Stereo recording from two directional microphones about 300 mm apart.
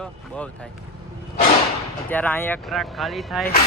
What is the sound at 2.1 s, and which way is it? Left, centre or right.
Speech, centre.